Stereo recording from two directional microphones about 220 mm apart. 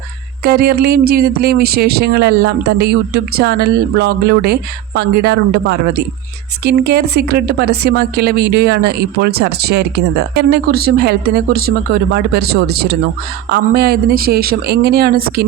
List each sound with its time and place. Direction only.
0.4 s speech: 45° right (ahead or behind)